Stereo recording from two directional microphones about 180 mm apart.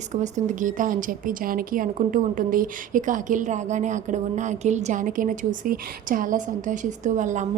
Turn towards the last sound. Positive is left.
turn(degrees=-45)  # may be behind; listen again after turning